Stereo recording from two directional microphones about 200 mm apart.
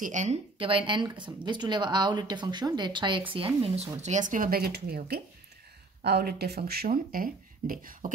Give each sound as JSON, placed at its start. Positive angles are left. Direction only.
{"t": 0.0, "sound": "speech", "side_deg": -35}